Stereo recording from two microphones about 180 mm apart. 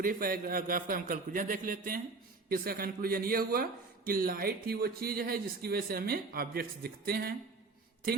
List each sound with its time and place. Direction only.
0.0 s a man's voice: 55° right (ahead or behind)